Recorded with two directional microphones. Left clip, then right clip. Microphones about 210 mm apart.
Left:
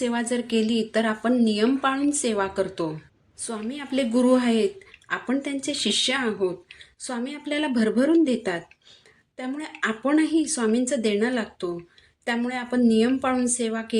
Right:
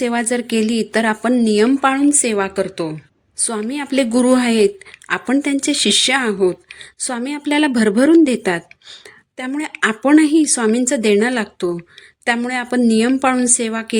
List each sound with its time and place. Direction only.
0.0 s a woman's voice: 40° right (ahead or behind)
3.4 s a woman's voice: 45° right (ahead or behind)